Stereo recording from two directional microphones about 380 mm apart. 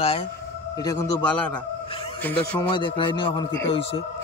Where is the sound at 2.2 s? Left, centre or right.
Centre.